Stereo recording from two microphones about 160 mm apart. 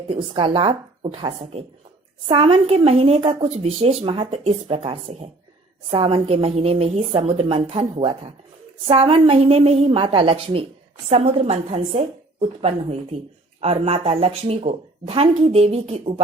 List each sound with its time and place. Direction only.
0.1 s speech: 35° right (ahead or behind)